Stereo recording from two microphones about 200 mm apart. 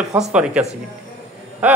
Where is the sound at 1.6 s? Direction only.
5° right (ahead or behind).